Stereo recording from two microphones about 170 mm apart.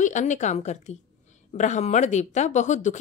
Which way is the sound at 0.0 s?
45° left (ahead or behind).